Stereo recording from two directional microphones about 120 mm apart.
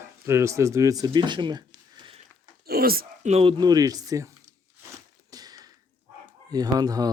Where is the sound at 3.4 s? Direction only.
35° right (ahead or behind).